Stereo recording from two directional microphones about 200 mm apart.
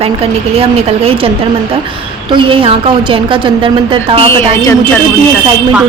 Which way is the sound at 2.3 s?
25° right (ahead or behind).